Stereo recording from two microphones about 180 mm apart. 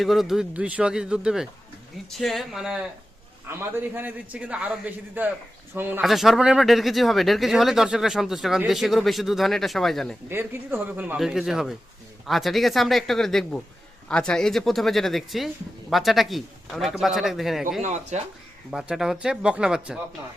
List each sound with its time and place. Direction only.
0.0 s speech: centre (ahead or behind)
3.4 s a man's voice: 15° right (ahead or behind); by 10.2 s centre (ahead or behind)
10.2 s a man's voice: 15° right (ahead or behind)
17.8 s speech: 40° right (ahead or behind)
18.7 s speech: 5° right (ahead or behind)